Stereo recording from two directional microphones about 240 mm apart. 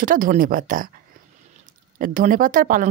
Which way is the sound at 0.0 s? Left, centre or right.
Right.